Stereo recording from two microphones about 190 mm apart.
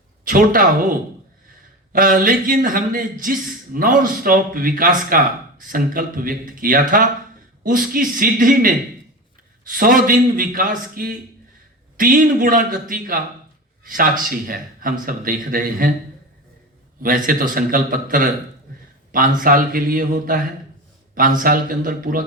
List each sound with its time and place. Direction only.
0.3 s speech: 45° right (ahead or behind)
17.0 s speech: 45° right (ahead or behind)